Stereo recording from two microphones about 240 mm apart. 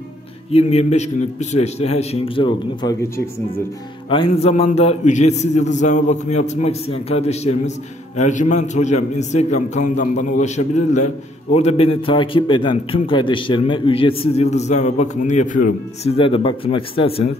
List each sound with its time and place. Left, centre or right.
0.5 s a man's voice: left
4.1 s a man's voice: left